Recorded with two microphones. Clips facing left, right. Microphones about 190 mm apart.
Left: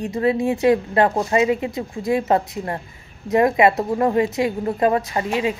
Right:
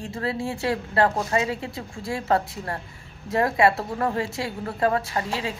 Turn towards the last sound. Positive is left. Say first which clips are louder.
# left 6 dB
turn(degrees=15)  # may be behind; listen again after turning